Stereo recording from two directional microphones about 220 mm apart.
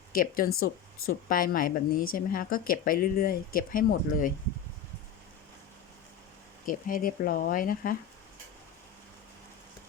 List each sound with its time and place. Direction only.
0.1 s speech: 40° left (ahead or behind)
6.7 s speech: 40° left (ahead or behind)